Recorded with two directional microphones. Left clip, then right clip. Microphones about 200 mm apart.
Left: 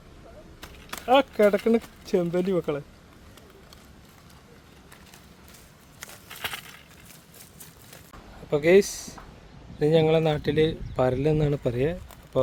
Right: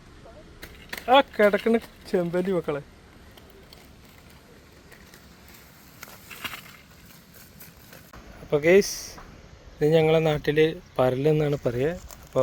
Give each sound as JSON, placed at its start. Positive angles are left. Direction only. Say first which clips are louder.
{"t": 1.0, "sound": "speech", "louder": "right 1 dB", "side_deg": 10}
{"t": 8.4, "sound": "speech", "louder": "even", "side_deg": 15}